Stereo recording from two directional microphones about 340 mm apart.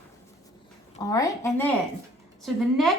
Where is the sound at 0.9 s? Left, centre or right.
Centre.